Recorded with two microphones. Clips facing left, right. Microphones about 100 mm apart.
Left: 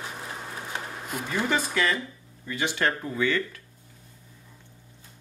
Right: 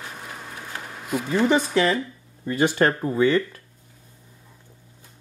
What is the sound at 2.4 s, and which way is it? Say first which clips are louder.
Speech: right 7 dB; 40° right (ahead or behind).